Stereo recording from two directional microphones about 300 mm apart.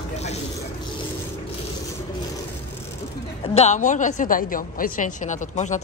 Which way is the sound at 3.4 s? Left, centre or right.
Left.